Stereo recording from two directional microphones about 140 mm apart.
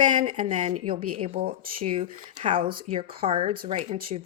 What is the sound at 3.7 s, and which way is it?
Speech, 50° right (ahead or behind).